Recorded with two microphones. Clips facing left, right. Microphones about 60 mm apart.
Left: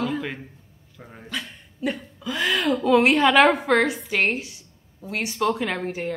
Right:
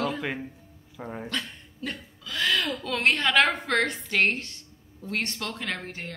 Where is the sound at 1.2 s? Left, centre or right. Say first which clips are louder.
Left 5 dB; centre.